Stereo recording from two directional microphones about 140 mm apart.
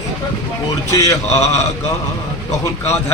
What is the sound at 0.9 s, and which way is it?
Speech, 20° left (ahead or behind).